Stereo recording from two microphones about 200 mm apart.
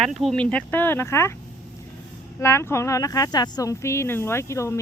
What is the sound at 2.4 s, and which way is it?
Speech, 15° left (ahead or behind).